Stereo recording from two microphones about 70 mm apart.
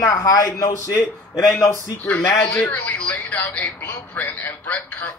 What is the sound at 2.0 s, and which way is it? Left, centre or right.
A man's voice, left.